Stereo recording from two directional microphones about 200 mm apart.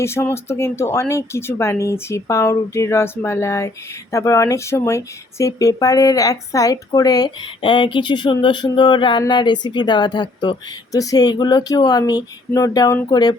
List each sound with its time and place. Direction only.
0.0 s speech: 15° left (ahead or behind)